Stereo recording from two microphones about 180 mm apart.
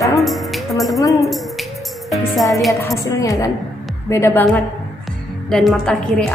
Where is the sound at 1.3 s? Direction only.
Centre (ahead or behind).